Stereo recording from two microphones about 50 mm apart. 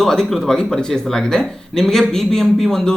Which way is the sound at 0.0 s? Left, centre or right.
Centre.